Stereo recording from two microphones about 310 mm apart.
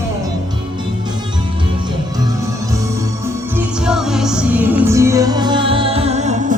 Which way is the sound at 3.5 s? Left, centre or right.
Centre.